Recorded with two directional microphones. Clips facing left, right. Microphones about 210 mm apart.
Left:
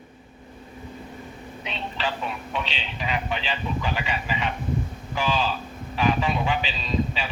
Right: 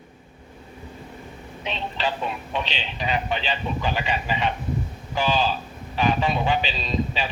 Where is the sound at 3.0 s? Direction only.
30° right (ahead or behind).